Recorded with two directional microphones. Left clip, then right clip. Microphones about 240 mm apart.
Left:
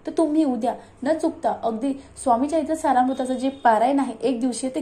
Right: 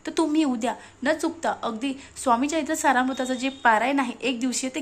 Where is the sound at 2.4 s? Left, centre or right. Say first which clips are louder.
Left 3 dB; centre.